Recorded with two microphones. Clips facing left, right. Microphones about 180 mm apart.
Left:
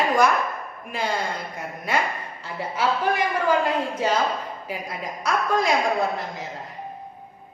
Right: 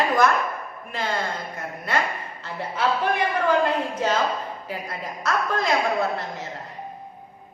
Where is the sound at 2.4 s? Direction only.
10° left (ahead or behind).